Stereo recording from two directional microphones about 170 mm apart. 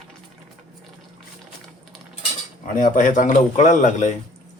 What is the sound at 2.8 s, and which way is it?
A man's voice, 50° left (ahead or behind).